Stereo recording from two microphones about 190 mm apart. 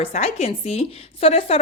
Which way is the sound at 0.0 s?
35° left (ahead or behind).